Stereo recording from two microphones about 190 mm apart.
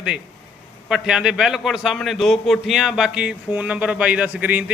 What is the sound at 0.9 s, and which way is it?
A man's voice, 5° right (ahead or behind).